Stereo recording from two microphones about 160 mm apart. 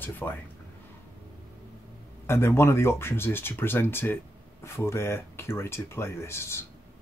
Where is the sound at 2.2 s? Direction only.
15° left (ahead or behind).